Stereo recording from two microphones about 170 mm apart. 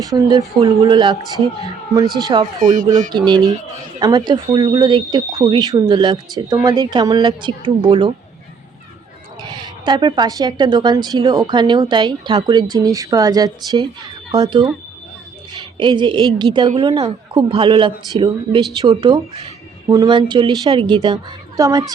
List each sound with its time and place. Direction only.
0.0 s speech: 20° right (ahead or behind)
2.1 s speech: 25° right (ahead or behind)
2.6 s speech: 50° right (ahead or behind)
3.1 s speech: 25° right (ahead or behind)
9.4 s speech: 25° right (ahead or behind)
15.8 s speech: 25° right (ahead or behind)